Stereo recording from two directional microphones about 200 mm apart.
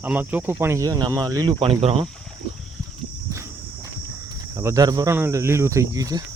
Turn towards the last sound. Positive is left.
turn(degrees=-15)  # may be behind; listen again after turning